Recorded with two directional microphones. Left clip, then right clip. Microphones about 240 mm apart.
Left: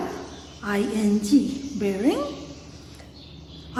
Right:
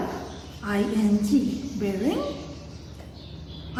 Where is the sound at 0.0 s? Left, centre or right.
Centre.